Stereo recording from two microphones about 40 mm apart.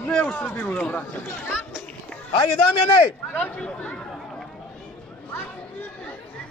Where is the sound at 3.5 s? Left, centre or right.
Left.